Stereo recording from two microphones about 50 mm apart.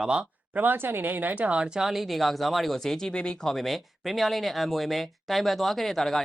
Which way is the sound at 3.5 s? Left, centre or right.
Centre.